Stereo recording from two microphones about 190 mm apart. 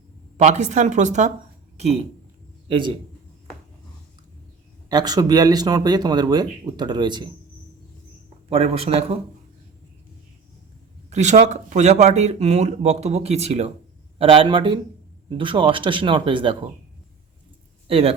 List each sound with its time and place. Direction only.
0.3 s a man's voice: 40° right (ahead or behind)
4.9 s speech: 20° right (ahead or behind)
8.4 s speech: 30° right (ahead or behind)
11.1 s speech: 40° right (ahead or behind)
17.8 s speech: 30° right (ahead or behind)